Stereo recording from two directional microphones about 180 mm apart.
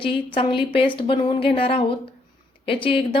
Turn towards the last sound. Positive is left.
turn(degrees=30)  # may be behind; listen again after turning